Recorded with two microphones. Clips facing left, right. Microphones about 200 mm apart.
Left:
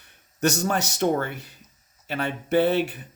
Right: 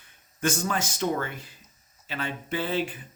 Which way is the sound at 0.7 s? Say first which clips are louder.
Left 5 dB; 70° left (ahead or behind).